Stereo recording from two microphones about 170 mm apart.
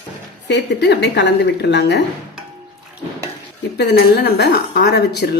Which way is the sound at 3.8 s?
75° left (ahead or behind).